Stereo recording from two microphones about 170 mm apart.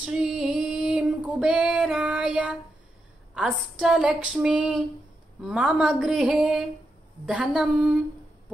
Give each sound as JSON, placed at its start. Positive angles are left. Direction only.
{"t": 0.0, "sound": "music", "side_deg": -5}
{"t": 3.8, "sound": "speech", "side_deg": -5}